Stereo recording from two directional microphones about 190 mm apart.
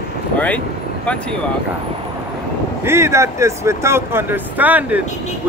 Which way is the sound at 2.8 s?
15° right (ahead or behind).